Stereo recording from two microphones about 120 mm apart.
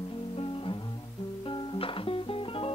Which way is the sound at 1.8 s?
50° left (ahead or behind).